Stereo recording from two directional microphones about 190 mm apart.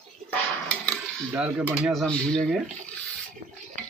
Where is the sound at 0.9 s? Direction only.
5° right (ahead or behind).